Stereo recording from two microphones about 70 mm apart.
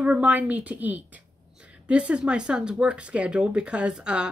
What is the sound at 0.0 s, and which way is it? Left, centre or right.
A woman's voice, right.